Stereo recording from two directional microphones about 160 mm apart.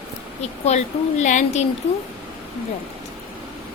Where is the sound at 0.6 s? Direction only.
45° left (ahead or behind).